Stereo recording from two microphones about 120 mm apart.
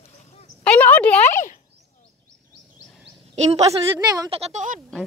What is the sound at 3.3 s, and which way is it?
Speech, 70° right (ahead or behind).